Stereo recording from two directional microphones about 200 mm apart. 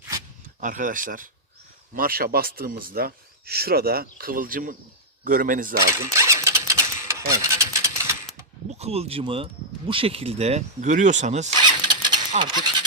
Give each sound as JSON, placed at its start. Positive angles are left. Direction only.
{"t": 0.6, "sound": "speech", "side_deg": -40}
{"t": 5.8, "sound": "a sound", "side_deg": -15}
{"t": 8.7, "sound": "speech", "side_deg": -30}
{"t": 11.6, "sound": "vehicle", "side_deg": -20}
{"t": 12.4, "sound": "speech", "side_deg": -20}